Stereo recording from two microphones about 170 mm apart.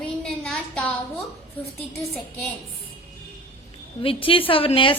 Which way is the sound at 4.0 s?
30° left (ahead or behind).